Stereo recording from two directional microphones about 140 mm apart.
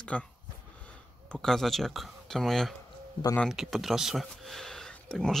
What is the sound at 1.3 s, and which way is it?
Speech, 5° left (ahead or behind).